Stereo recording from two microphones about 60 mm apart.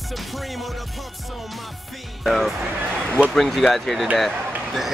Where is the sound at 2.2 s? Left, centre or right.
Centre.